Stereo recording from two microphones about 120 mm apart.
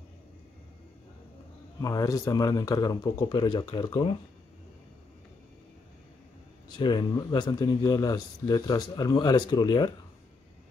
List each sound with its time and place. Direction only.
1.8 s speech: 30° left (ahead or behind)
6.8 s speech: 40° left (ahead or behind)